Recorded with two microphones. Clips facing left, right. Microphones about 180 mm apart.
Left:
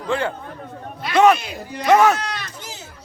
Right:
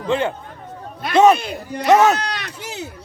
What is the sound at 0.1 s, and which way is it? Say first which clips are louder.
Speech: right 2 dB; 20° right (ahead or behind).